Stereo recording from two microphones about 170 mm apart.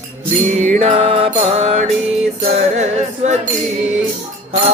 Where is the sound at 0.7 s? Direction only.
35° right (ahead or behind).